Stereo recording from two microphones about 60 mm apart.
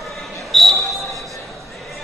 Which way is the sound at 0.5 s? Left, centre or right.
Centre.